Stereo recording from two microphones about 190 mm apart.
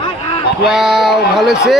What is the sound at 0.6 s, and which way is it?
A man's voice, centre (ahead or behind).